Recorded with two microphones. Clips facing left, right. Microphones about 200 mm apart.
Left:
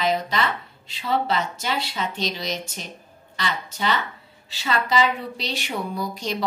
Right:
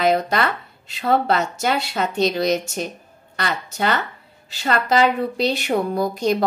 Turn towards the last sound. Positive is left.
turn(degrees=-55)  # may be behind; listen again after turning